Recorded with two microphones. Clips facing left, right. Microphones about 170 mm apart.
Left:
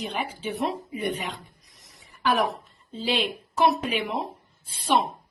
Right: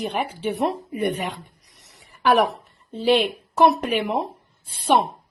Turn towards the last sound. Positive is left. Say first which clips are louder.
# right 4 dB
turn(degrees=-55)  # may be behind; listen again after turning